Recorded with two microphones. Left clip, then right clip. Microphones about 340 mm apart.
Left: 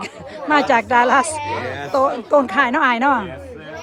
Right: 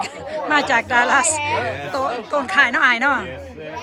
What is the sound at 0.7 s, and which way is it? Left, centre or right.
A man's voice, centre.